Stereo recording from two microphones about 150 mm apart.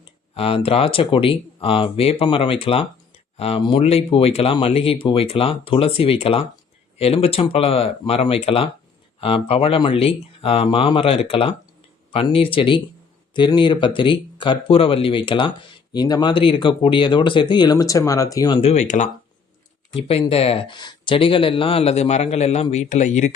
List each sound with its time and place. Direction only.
0.0 s speech: 40° left (ahead or behind)
18.6 s speech: 50° left (ahead or behind)
19.9 s speech: 40° left (ahead or behind)